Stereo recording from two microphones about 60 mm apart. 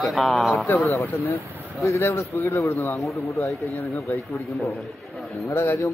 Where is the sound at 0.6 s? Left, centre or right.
Left.